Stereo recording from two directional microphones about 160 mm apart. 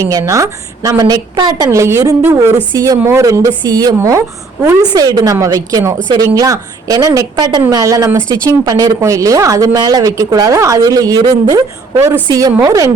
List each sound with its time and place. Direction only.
0.0 s a woman's voice: 20° right (ahead or behind)